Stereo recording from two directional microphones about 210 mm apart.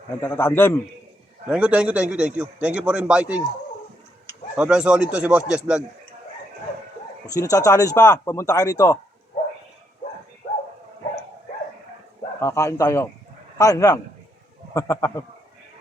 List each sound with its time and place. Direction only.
0.2 s speech: 10° left (ahead or behind)
1.5 s a man's voice: 5° right (ahead or behind)
4.5 s a man's voice: 5° right (ahead or behind)
7.3 s speech: 15° left (ahead or behind)
12.4 s speech: 15° left (ahead or behind)